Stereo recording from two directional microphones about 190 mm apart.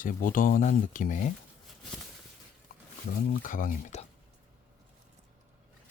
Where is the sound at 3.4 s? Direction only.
45° left (ahead or behind).